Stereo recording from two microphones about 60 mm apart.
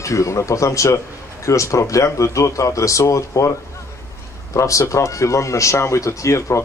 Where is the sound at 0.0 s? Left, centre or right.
Left.